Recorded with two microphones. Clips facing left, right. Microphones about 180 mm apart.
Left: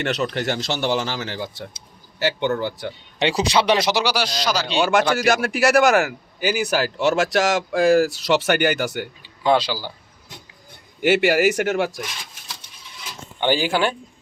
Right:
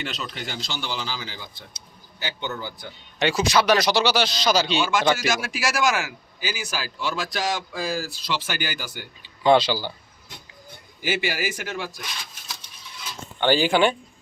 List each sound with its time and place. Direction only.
0.0 s a man's voice: 70° left (ahead or behind)
3.2 s speech: 30° left (ahead or behind); by 4.3 s 10° left (ahead or behind)
4.8 s a man's voice: 65° left (ahead or behind)
9.4 s speech: 5° left (ahead or behind)
11.0 s a man's voice: 70° left (ahead or behind)
13.4 s speech: 10° left (ahead or behind)